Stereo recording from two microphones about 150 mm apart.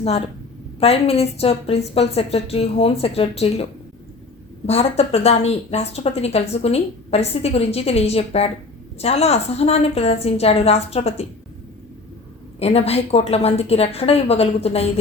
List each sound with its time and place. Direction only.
0.8 s a woman's voice: 45° left (ahead or behind)
12.5 s a woman's voice: 45° left (ahead or behind)